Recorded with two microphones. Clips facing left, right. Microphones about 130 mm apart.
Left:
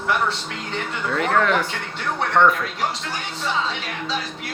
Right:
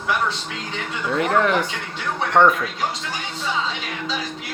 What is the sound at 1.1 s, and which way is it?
Speech, 20° right (ahead or behind).